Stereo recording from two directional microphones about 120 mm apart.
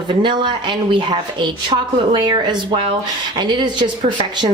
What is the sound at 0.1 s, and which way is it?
Speech, 40° right (ahead or behind).